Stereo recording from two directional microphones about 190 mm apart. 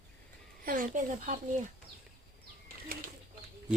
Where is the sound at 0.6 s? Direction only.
45° right (ahead or behind).